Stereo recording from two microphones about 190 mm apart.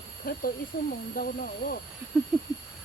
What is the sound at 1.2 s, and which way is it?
Speech, 50° left (ahead or behind).